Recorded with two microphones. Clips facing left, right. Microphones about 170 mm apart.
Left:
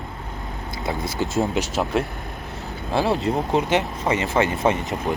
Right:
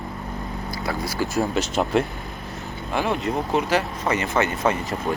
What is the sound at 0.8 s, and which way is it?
Speech, 20° left (ahead or behind).